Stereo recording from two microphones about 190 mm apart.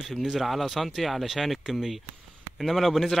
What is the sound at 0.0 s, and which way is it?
Speech, centre (ahead or behind).